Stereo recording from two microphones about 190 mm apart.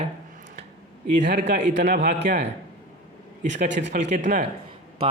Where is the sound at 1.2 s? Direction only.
50° right (ahead or behind).